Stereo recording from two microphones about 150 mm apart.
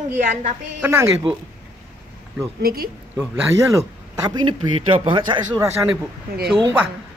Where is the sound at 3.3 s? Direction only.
20° right (ahead or behind).